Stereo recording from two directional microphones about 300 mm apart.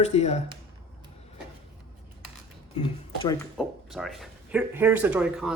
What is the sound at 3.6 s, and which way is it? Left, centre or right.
Speech, centre.